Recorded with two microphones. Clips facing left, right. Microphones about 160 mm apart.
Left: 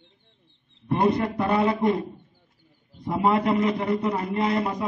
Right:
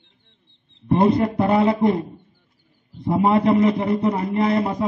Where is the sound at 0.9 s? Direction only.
25° right (ahead or behind).